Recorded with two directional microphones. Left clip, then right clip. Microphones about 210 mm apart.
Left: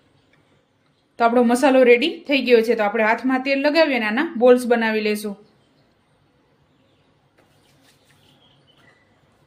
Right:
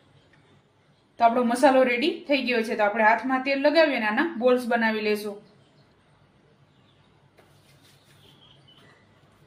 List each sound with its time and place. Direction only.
1.1 s a woman's voice: 50° left (ahead or behind)